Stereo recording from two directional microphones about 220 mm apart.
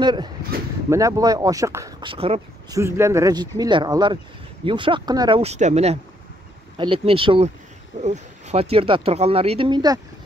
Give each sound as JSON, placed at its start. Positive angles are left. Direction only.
{"t": 0.0, "sound": "speech", "side_deg": -20}
{"t": 2.8, "sound": "speech", "side_deg": -10}